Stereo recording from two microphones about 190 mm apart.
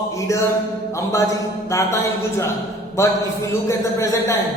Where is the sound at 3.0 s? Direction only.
15° left (ahead or behind).